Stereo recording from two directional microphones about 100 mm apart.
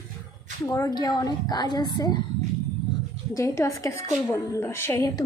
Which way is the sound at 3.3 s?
30° left (ahead or behind).